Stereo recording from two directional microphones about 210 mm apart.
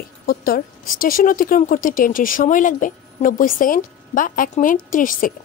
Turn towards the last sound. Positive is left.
turn(degrees=40)  # may be behind; listen again after turning